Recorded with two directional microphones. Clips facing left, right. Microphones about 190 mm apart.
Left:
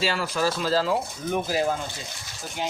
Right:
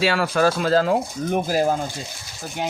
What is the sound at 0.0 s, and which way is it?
Speech, 65° right (ahead or behind).